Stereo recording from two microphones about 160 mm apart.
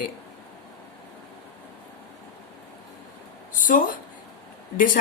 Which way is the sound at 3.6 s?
55° left (ahead or behind).